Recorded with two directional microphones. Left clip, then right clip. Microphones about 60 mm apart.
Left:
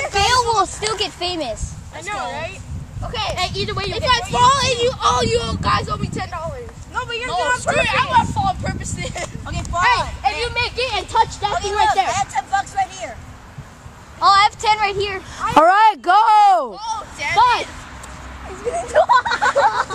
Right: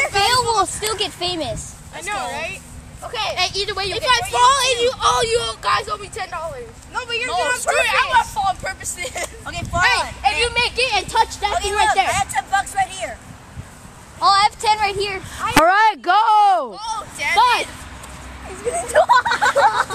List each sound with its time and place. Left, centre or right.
0.1 s a sound: centre
0.7 s speech: centre
2.1 s a woman's voice: right
3.1 s speech: centre
3.3 s a woman's voice: right
3.9 s speech: centre
6.9 s speech: right
7.2 s speech: centre
9.5 s speech: right
14.2 s a woman's voice: right
15.6 s speech: left
16.7 s speech: centre
18.5 s speech: right